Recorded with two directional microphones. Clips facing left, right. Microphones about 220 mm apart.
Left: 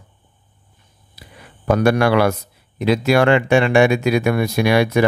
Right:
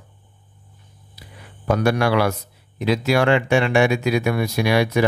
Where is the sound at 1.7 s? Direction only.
55° left (ahead or behind).